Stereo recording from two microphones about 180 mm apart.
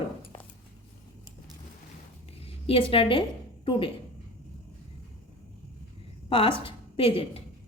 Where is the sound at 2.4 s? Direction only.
30° left (ahead or behind).